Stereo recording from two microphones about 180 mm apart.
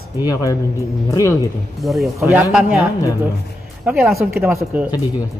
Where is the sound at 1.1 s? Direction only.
15° left (ahead or behind).